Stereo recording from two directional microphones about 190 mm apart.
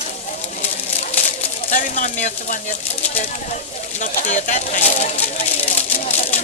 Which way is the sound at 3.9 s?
40° left (ahead or behind).